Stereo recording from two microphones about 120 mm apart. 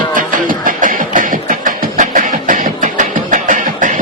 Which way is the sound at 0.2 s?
90° right.